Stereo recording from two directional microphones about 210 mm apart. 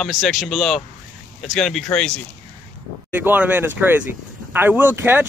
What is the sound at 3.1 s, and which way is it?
A man's voice, 10° right (ahead or behind).